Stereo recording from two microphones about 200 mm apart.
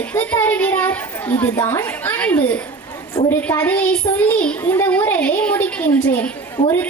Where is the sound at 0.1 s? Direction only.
10° left (ahead or behind).